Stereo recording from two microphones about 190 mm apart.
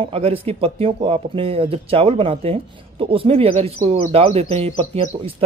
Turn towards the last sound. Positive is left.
turn(degrees=-30)  # may be behind; listen again after turning